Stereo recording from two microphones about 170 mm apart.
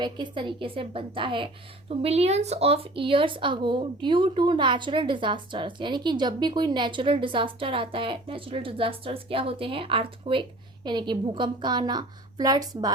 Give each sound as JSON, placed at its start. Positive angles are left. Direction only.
{"t": 0.0, "sound": "a woman's voice", "side_deg": -30}